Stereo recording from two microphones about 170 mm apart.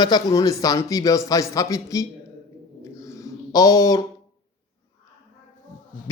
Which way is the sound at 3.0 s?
20° left (ahead or behind).